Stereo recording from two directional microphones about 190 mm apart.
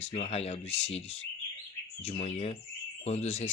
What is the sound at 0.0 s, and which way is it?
Speech, 35° left (ahead or behind).